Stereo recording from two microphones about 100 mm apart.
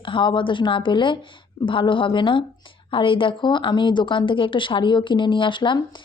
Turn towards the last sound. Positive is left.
turn(degrees=55)  # may be behind; listen again after turning